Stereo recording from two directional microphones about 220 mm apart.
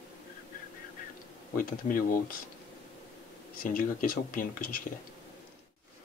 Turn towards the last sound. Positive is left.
turn(degrees=40)  # may be behind; listen again after turning